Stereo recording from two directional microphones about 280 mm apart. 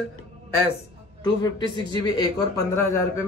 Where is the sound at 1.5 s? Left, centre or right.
Centre.